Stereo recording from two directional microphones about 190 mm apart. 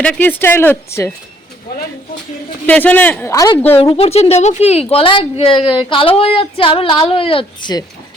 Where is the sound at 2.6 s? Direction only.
10° left (ahead or behind).